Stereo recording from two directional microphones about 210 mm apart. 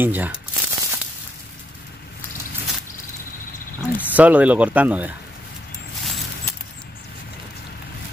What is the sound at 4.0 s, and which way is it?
Speech, 5° right (ahead or behind).